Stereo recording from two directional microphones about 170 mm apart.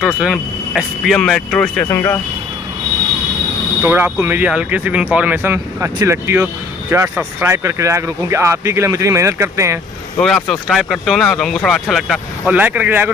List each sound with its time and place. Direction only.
0.0 s speech: 5° right (ahead or behind); by 2.1 s 15° left (ahead or behind)
3.8 s speech: 10° right (ahead or behind)
10.1 s speech: 5° left (ahead or behind)